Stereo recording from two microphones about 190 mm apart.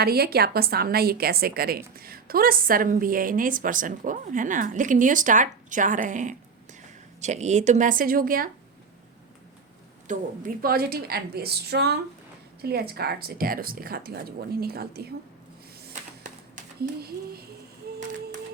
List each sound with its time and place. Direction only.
0.0 s a woman's voice: 55° right (ahead or behind)
10.1 s a woman's voice: 50° right (ahead or behind)
16.8 s a woman's voice: 55° right (ahead or behind)